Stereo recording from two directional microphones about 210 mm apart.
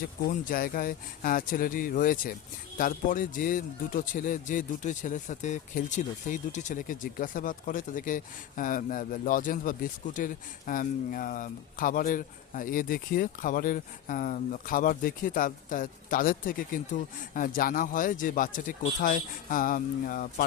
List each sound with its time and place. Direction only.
0.3 s speech: 40° left (ahead or behind)